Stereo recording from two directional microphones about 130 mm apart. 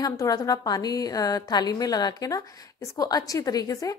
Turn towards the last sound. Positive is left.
turn(degrees=25)  # may be behind; listen again after turning